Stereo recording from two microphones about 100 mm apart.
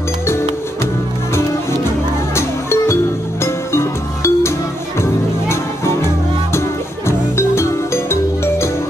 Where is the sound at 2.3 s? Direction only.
25° left (ahead or behind).